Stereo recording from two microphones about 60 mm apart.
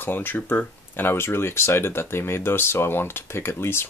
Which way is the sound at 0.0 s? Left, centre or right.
Left.